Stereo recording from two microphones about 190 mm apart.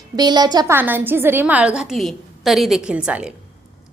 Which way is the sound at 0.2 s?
20° right (ahead or behind).